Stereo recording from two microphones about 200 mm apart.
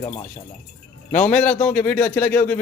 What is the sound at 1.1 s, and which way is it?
A man's voice, 5° left (ahead or behind).